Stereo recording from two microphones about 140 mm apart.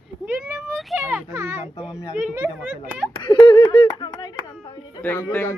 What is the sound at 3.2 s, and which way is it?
Speech, 35° left (ahead or behind).